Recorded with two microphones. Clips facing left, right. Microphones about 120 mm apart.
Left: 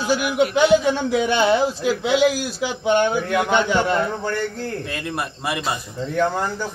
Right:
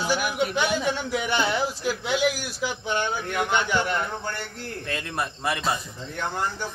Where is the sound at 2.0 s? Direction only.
90° left.